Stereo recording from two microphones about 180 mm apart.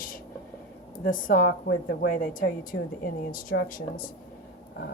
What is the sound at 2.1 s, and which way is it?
A woman's voice, 50° left (ahead or behind).